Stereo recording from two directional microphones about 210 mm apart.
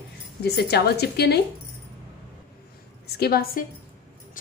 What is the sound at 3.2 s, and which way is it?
Speech, 45° left (ahead or behind).